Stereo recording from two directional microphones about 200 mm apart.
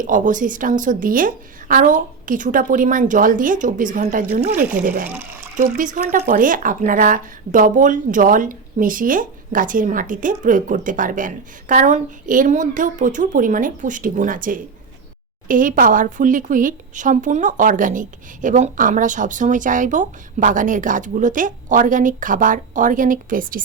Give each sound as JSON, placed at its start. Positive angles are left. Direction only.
{"t": 0.0, "sound": "speech", "side_deg": -40}
{"t": 5.0, "sound": "speech", "side_deg": -10}
{"t": 5.5, "sound": "speech", "side_deg": -40}